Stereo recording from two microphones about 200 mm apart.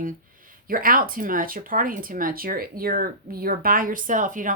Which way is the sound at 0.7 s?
45° right (ahead or behind).